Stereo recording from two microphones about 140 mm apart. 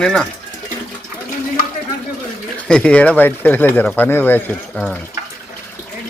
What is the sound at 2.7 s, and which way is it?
Speech, 10° left (ahead or behind).